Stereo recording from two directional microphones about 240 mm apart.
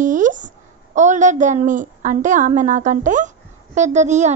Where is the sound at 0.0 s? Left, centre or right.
Right.